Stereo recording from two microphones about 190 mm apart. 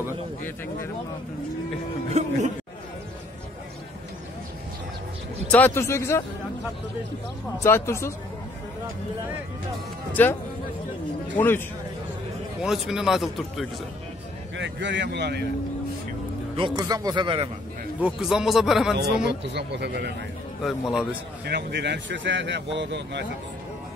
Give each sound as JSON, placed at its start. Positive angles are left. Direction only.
{"t": 2.1, "sound": "speech", "side_deg": -40}
{"t": 5.5, "sound": "speech", "side_deg": 10}
{"t": 7.6, "sound": "speech", "side_deg": 15}
{"t": 10.2, "sound": "speech", "side_deg": 10}
{"t": 12.6, "sound": "speech", "side_deg": 0}
{"t": 14.6, "sound": "a man's voice", "side_deg": -70}
{"t": 16.5, "sound": "a man's voice", "side_deg": -20}
{"t": 18.0, "sound": "speech", "side_deg": -5}
{"t": 18.9, "sound": "a man's voice", "side_deg": -60}
{"t": 20.6, "sound": "speech", "side_deg": 0}
{"t": 21.5, "sound": "speech", "side_deg": -60}